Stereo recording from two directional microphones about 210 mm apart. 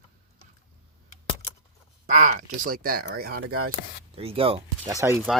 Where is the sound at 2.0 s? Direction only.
35° right (ahead or behind).